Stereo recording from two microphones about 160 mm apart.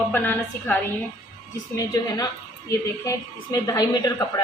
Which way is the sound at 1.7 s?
25° left (ahead or behind).